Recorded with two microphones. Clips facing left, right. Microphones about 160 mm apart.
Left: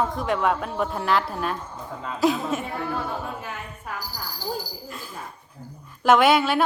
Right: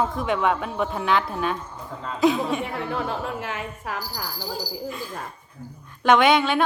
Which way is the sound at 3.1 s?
90° right.